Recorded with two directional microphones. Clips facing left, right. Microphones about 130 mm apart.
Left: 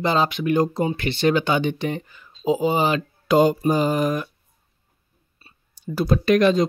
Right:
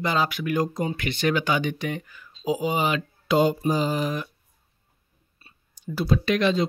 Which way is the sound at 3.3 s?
50° left (ahead or behind).